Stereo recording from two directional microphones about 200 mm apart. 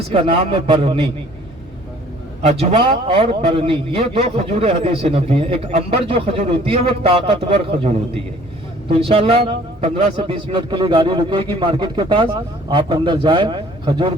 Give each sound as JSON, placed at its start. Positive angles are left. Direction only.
{"t": 0.1, "sound": "a man's voice", "side_deg": -25}
{"t": 2.4, "sound": "a man's voice", "side_deg": -30}